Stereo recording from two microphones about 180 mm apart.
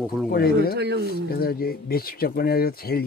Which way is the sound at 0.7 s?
65° right (ahead or behind).